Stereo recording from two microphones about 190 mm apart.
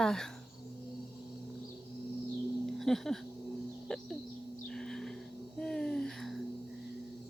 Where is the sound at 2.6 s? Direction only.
Centre (ahead or behind).